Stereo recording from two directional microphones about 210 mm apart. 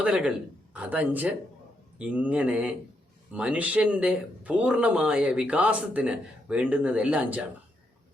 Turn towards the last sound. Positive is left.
turn(degrees=-5)  # may be behind; listen again after turning